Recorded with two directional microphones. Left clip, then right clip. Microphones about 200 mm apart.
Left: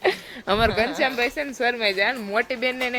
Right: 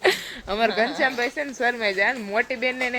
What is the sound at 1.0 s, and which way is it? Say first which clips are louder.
A woman's voice: even; centre (ahead or behind).